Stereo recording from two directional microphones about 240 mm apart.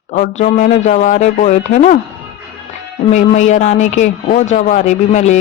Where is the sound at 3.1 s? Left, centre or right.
Left.